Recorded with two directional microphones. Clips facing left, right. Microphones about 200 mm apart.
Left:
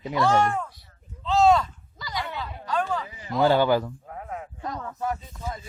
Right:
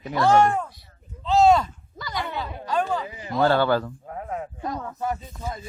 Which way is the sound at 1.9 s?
55° right (ahead or behind).